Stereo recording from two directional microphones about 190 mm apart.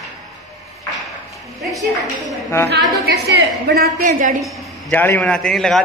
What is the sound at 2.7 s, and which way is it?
A woman's voice, 60° right (ahead or behind).